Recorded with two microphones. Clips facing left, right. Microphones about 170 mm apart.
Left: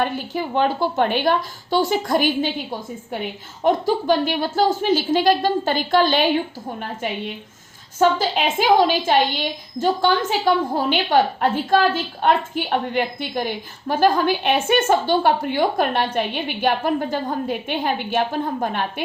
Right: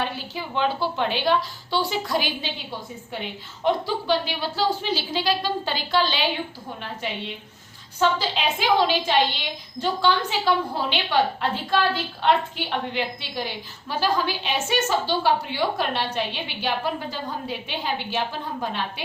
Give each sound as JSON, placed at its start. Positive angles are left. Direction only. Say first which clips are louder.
{"t": 0.0, "sound": "a woman's voice", "louder": "left 6 dB", "side_deg": 50}
{"t": 7.9, "sound": "a woman's voice", "louder": "left 5 dB", "side_deg": 45}